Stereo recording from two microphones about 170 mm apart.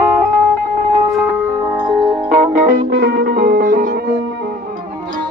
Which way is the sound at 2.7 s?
60° right (ahead or behind).